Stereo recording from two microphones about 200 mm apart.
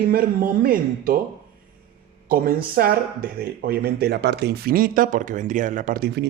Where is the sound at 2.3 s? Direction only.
45° right (ahead or behind).